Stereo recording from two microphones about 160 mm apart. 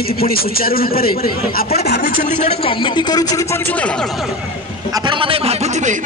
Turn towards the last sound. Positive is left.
turn(degrees=-40)  # may be behind; listen again after turning